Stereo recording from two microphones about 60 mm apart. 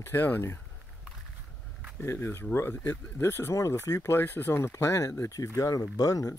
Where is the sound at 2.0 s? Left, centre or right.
Left.